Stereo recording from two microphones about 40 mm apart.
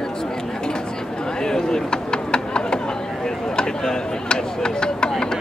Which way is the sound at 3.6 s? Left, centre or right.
Centre.